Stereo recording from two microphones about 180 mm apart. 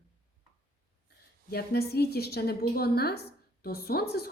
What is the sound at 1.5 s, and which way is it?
A woman's voice, 60° left (ahead or behind).